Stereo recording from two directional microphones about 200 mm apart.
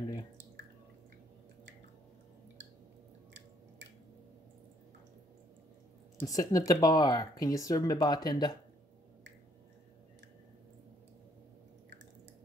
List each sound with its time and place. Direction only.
6.1 s speech: 15° left (ahead or behind)